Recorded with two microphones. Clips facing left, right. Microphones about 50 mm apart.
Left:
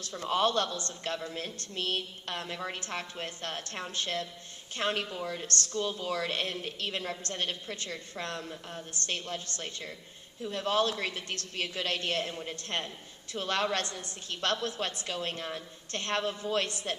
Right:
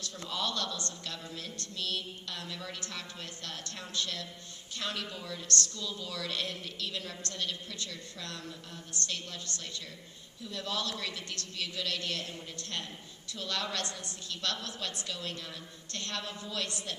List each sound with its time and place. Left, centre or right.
0.0 s speech: left